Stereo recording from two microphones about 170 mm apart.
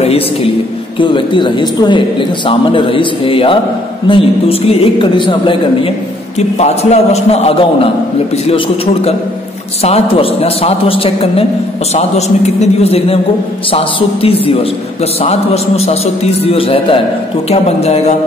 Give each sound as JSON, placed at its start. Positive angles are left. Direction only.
{"t": 0.0, "sound": "a woman's voice", "side_deg": 35}
{"t": 6.6, "sound": "a woman's voice", "side_deg": 40}